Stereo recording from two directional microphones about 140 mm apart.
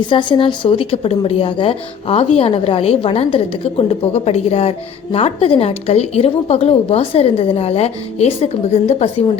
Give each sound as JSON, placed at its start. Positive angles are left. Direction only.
{"t": 0.0, "sound": "speech", "side_deg": 35}